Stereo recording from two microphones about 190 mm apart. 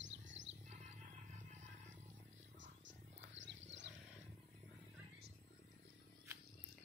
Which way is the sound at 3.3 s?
70° right (ahead or behind).